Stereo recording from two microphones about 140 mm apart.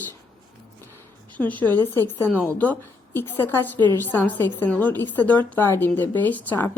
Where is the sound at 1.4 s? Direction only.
10° left (ahead or behind).